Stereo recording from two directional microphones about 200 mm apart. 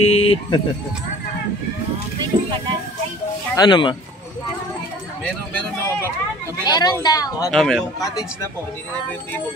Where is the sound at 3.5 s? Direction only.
20° left (ahead or behind).